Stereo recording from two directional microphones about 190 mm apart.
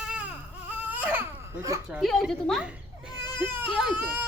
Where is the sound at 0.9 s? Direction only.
10° right (ahead or behind).